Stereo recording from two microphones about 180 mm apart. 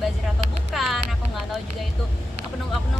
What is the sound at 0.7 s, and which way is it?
Speech, centre (ahead or behind).